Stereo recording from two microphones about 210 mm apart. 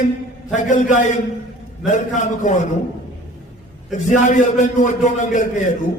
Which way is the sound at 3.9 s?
35° left (ahead or behind).